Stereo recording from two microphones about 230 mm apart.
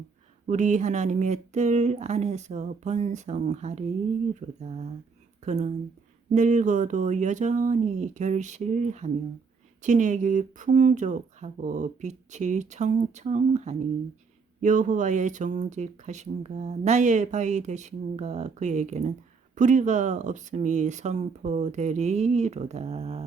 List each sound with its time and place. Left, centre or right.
0.4 s speech: right